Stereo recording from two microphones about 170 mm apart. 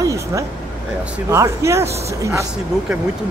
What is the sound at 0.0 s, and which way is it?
Vehicle, 20° right (ahead or behind).